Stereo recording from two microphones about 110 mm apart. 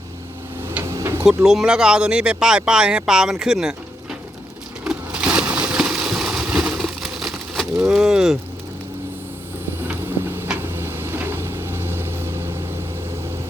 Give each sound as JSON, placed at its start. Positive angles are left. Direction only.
{"t": 0.9, "sound": "tick-tock", "side_deg": -25}
{"t": 1.5, "sound": "speech", "side_deg": -5}
{"t": 4.8, "sound": "a sound", "side_deg": -10}
{"t": 9.9, "sound": "vehicle", "side_deg": -20}